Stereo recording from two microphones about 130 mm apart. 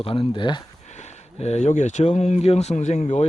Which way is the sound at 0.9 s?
60° left (ahead or behind).